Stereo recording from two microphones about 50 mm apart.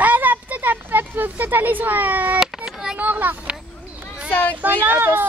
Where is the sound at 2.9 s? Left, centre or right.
Right.